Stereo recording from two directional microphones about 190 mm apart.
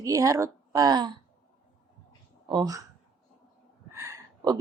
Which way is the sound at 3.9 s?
15° right (ahead or behind).